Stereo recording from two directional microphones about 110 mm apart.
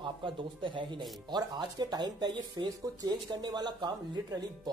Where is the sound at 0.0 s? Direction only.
45° right (ahead or behind).